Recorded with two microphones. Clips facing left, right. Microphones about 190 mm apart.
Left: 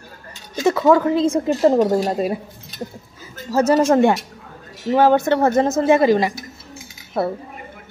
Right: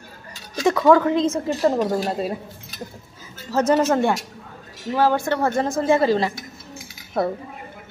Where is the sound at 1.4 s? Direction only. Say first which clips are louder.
Left 5 dB; 20° left (ahead or behind).